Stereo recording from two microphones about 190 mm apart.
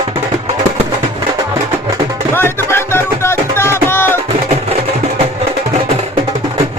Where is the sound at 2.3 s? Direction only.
10° left (ahead or behind).